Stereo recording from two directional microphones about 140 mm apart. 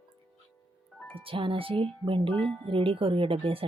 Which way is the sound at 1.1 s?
40° right (ahead or behind).